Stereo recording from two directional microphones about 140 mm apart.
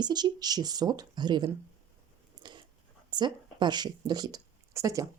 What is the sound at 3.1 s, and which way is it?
A woman's voice, 30° right (ahead or behind).